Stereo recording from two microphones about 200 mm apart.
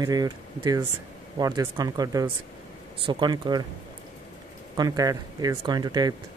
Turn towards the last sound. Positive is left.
turn(degrees=-20)  # may be behind; listen again after turning